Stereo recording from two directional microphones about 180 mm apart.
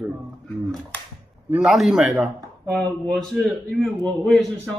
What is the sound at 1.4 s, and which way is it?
A man's voice, 5° right (ahead or behind).